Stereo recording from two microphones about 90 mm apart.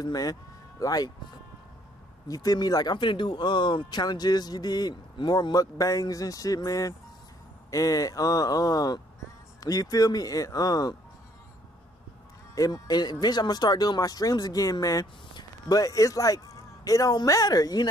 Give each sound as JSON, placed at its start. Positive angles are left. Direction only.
{"t": 0.0, "sound": "speech", "side_deg": 45}
{"t": 2.2, "sound": "speech", "side_deg": 45}
{"t": 3.0, "sound": "speech", "side_deg": 65}
{"t": 12.5, "sound": "speech", "side_deg": 40}